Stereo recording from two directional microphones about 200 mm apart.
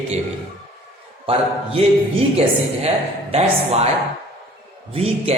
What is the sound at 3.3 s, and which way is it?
Speech, 30° right (ahead or behind).